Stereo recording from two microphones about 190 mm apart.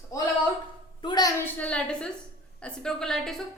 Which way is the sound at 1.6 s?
5° left (ahead or behind).